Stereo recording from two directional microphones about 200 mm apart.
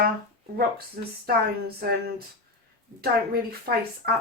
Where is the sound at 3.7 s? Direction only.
50° right (ahead or behind).